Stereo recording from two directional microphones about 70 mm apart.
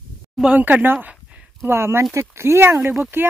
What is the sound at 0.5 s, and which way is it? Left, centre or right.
A child's voice, right.